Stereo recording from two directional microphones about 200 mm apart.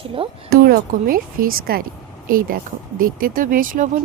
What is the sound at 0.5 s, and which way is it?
Speech, 45° right (ahead or behind).